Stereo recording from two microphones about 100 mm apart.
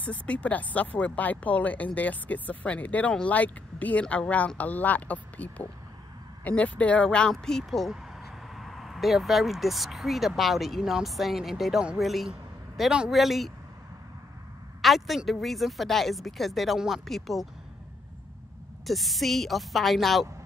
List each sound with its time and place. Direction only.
0.0 s speech: 15° left (ahead or behind)
14.8 s speech: centre (ahead or behind)
18.9 s speech: centre (ahead or behind)